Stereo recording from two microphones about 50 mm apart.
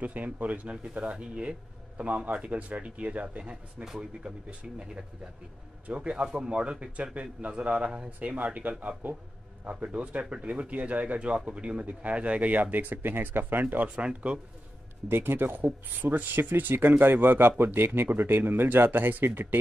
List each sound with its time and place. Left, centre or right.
0.0 s speech: right
8.5 s speech: right
12.7 s speech: right
13.8 s speech: right
15.0 s speech: right